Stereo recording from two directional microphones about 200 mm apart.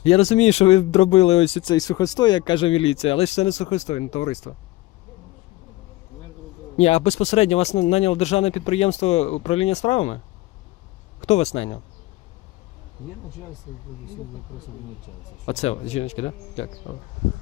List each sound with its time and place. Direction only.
0.0 s speech: 30° left (ahead or behind)
6.7 s speech: 30° left (ahead or behind)
11.2 s speech: 35° left (ahead or behind)
15.4 s speech: 30° left (ahead or behind)